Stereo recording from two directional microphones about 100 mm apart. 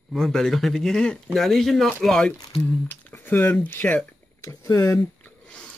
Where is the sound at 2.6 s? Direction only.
20° left (ahead or behind).